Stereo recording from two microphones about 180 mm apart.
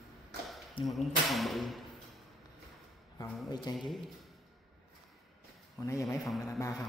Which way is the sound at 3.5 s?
25° left (ahead or behind).